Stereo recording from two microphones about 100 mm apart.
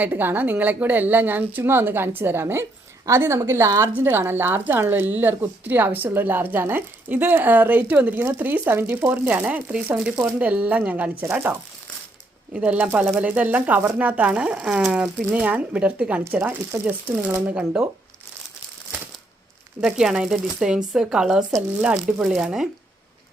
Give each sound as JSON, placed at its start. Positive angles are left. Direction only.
{"t": 0.0, "sound": "speech", "side_deg": -20}
{"t": 12.5, "sound": "speech", "side_deg": -15}
{"t": 19.8, "sound": "speech", "side_deg": -5}